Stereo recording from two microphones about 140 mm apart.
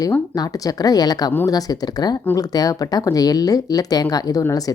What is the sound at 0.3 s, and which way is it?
Speech, 25° left (ahead or behind).